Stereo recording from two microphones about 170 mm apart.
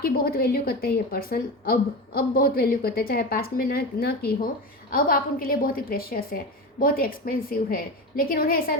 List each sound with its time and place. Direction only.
0.0 s a woman's voice: 65° left (ahead or behind)